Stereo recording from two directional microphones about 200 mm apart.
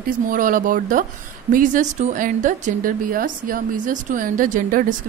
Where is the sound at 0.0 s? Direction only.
45° right (ahead or behind).